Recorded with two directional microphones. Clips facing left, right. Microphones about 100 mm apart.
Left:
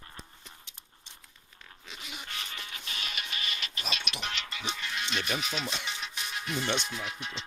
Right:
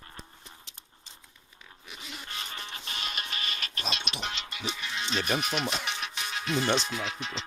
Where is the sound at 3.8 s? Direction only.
35° right (ahead or behind).